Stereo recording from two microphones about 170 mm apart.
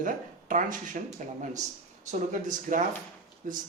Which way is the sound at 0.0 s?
50° right (ahead or behind).